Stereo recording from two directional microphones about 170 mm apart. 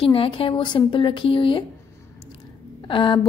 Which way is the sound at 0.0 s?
30° left (ahead or behind).